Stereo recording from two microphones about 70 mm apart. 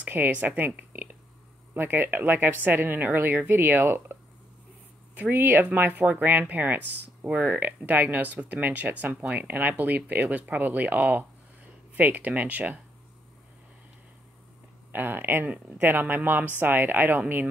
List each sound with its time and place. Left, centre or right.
0.0 s speech: right
14.9 s speech: right